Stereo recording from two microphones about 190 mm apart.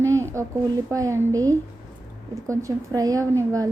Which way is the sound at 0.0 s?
15° right (ahead or behind).